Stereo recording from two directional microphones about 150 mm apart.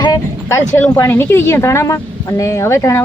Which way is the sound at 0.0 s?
20° left (ahead or behind).